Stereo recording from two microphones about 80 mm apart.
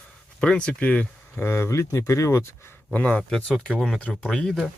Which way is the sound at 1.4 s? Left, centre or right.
Left.